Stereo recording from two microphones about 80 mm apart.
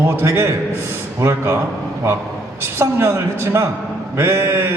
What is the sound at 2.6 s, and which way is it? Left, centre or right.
A woman's voice, right.